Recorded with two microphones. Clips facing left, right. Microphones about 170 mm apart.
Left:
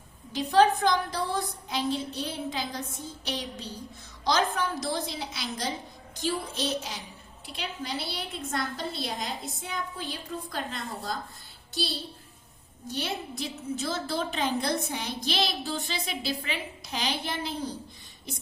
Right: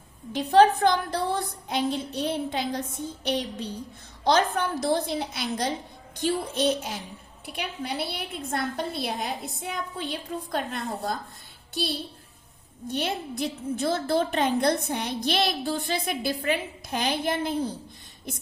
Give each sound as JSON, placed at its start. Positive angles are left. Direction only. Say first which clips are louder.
{"t": 0.3, "sound": "a woman's voice", "louder": "right 3 dB", "side_deg": -60}